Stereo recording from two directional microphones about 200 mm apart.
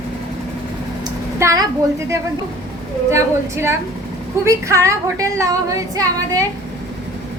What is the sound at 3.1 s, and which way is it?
Speech, 15° right (ahead or behind).